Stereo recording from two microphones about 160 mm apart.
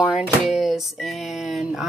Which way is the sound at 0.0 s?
5° right (ahead or behind).